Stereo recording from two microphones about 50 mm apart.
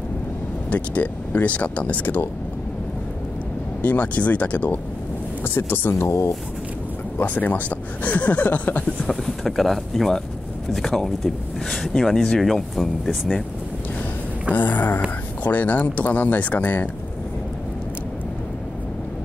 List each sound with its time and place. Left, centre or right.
0.7 s speech: left
3.8 s speech: left
5.4 s speech: left
5.9 s speech: left
7.2 s speech: left
9.1 s speech: centre
14.5 s speech: left